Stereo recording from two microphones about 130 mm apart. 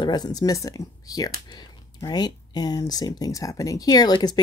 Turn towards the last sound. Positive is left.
turn(degrees=30)  # may be behind; listen again after turning